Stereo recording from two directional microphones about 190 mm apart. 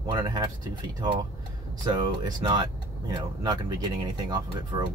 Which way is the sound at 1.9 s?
25° right (ahead or behind).